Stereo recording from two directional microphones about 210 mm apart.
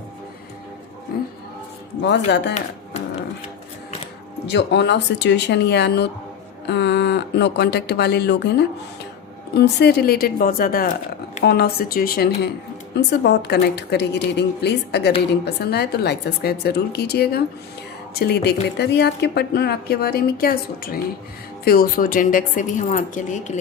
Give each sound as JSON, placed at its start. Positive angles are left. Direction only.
{"t": 2.0, "sound": "speech", "side_deg": 55}
{"t": 4.4, "sound": "a woman's voice", "side_deg": 55}